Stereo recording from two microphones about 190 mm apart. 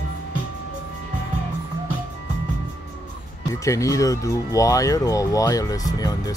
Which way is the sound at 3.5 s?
15° left (ahead or behind).